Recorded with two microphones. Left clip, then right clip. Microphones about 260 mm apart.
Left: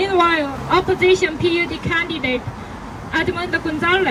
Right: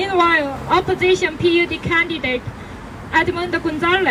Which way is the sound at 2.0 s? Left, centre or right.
Right.